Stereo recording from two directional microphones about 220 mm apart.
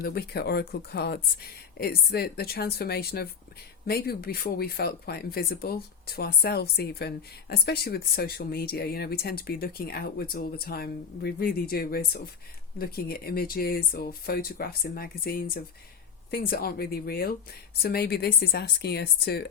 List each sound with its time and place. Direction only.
0.0 s speech: 45° left (ahead or behind)